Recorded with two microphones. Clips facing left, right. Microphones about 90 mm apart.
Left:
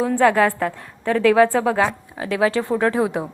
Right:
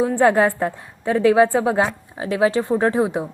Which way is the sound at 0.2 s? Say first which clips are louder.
Even; 25° right (ahead or behind).